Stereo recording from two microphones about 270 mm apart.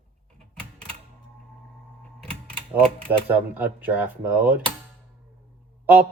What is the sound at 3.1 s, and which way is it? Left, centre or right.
Speech, centre.